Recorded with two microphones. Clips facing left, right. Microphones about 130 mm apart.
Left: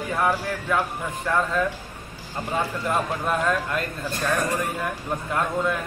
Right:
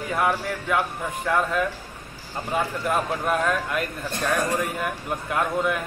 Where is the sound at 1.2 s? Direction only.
10° right (ahead or behind).